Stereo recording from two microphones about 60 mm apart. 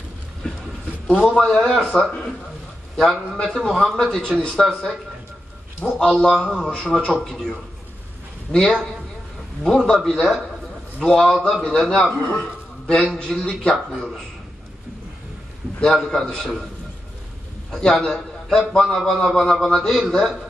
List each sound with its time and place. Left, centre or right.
1.1 s a man's voice: centre
12.1 s speech: left
12.4 s a man's voice: centre
15.8 s a man's voice: centre
17.6 s a man's voice: centre
18.9 s a man's voice: centre